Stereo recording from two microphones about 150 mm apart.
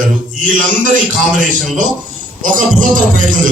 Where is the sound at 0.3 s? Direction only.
60° right (ahead or behind).